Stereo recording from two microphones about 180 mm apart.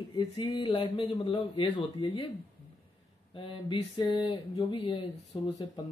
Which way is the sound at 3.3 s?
30° left (ahead or behind).